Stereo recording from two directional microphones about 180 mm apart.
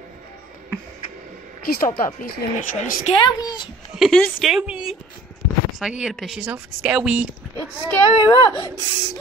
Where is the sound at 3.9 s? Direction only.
Centre (ahead or behind).